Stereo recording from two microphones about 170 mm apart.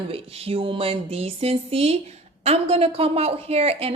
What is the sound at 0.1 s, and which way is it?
A woman's voice, 35° right (ahead or behind).